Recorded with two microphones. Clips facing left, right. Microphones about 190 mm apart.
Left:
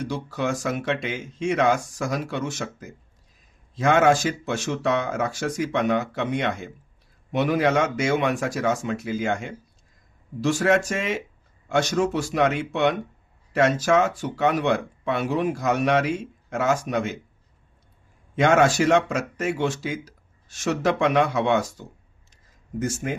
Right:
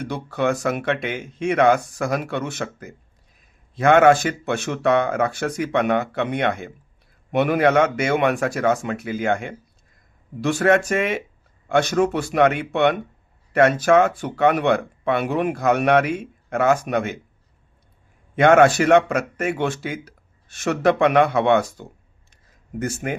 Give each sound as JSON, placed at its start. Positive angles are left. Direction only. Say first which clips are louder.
{"t": 0.3, "sound": "speech", "louder": "right 7 dB", "side_deg": -60}
{"t": 18.3, "sound": "speech", "louder": "right 4 dB", "side_deg": -60}